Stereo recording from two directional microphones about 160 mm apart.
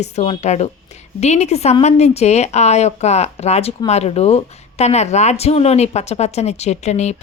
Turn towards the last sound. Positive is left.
turn(degrees=45)  # may be behind; listen again after turning